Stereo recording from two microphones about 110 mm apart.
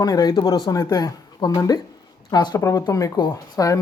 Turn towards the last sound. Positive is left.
turn(degrees=30)  # may be behind; listen again after turning